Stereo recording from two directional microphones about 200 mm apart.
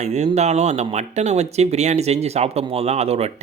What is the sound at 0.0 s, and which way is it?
Speech, 35° right (ahead or behind).